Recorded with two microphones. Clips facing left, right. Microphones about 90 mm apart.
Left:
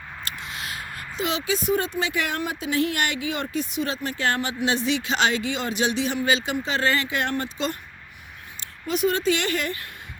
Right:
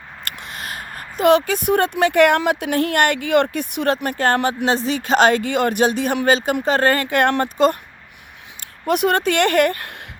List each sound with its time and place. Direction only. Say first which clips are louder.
0.3 s speech: right 4 dB; 55° right (ahead or behind)
4.6 s speech: right 4 dB; 40° right (ahead or behind)
8.9 s speech: right 5 dB; 60° right (ahead or behind)